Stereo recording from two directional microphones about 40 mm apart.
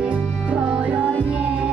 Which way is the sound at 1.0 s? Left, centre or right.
Left.